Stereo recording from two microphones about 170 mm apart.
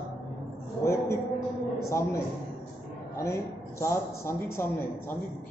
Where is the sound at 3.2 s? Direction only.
15° left (ahead or behind).